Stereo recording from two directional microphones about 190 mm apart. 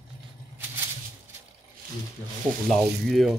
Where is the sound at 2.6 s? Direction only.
Centre (ahead or behind).